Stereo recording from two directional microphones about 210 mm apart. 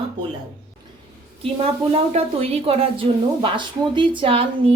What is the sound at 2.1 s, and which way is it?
A woman's voice, 25° right (ahead or behind).